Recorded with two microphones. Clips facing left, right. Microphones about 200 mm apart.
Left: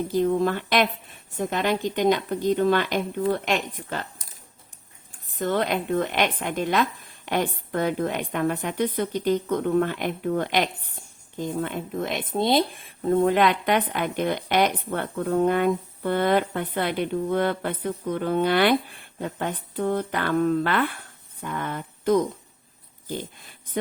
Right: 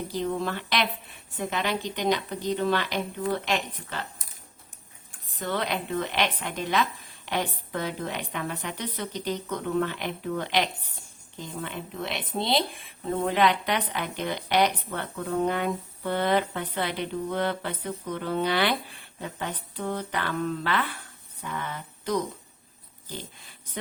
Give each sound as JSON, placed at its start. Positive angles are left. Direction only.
{"t": 0.1, "sound": "speech", "side_deg": 50}
{"t": 5.3, "sound": "speech", "side_deg": 50}
{"t": 21.4, "sound": "a sound", "side_deg": 50}
{"t": 23.0, "sound": "speech", "side_deg": 50}